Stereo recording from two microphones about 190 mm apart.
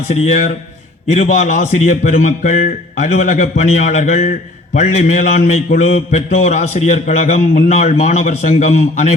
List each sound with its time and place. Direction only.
0.1 s a man's voice: 35° left (ahead or behind)